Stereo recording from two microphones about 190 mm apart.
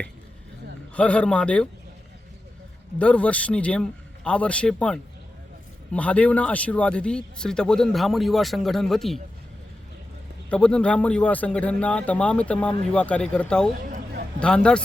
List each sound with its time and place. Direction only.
0.9 s speech: 5° left (ahead or behind)
3.0 s speech: 5° left (ahead or behind)
10.5 s speech: 5° left (ahead or behind)
13.9 s a sound: 55° right (ahead or behind)
14.3 s speech: 5° left (ahead or behind)